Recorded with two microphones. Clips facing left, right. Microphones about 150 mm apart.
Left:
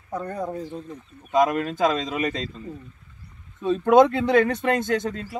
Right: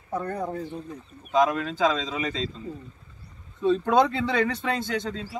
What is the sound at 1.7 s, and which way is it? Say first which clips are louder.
Speech: left 2 dB; 65° left (ahead or behind).